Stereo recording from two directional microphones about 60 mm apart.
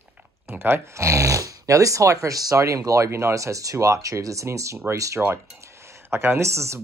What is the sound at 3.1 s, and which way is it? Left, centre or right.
Speech, right.